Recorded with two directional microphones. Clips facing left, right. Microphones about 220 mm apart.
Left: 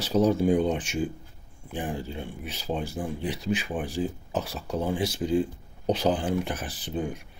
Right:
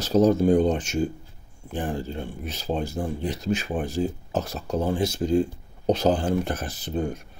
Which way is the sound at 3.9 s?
40° right (ahead or behind).